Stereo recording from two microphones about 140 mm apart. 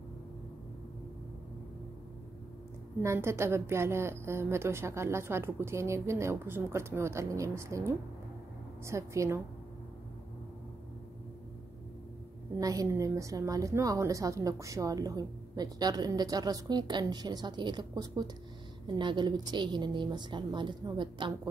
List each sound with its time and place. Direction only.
3.0 s a woman's voice: 20° right (ahead or behind)
12.5 s a woman's voice: 25° right (ahead or behind)